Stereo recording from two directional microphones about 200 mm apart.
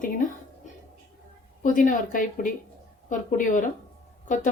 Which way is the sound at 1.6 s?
40° left (ahead or behind).